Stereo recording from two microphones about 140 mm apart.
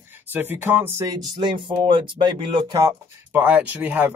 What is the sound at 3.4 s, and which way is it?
Speech, 10° right (ahead or behind).